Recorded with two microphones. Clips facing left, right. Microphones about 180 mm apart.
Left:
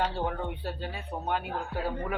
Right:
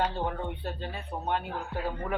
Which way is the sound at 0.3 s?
5° left (ahead or behind).